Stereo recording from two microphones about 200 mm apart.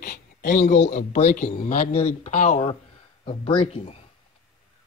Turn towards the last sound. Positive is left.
turn(degrees=30)  # may be behind; listen again after turning